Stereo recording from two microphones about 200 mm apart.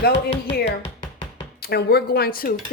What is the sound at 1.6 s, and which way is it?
Speech, 55° left (ahead or behind).